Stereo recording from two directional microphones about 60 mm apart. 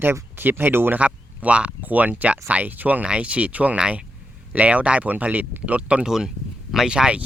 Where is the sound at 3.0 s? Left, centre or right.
Centre.